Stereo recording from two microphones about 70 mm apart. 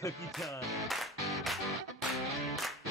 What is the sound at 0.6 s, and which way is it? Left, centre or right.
Music, centre.